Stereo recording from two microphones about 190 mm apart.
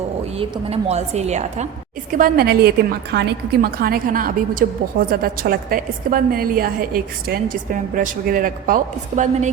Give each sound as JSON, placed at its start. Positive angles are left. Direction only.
{"t": 0.3, "sound": "a woman's voice", "side_deg": -30}
{"t": 2.1, "sound": "a woman's voice", "side_deg": -50}